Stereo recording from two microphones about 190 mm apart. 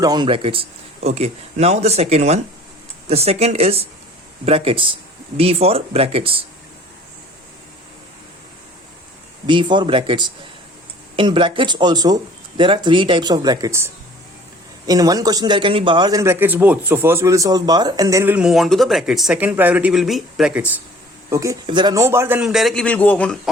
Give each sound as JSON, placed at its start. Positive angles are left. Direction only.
{"t": 0.0, "sound": "speech", "side_deg": -20}
{"t": 9.5, "sound": "speech", "side_deg": -25}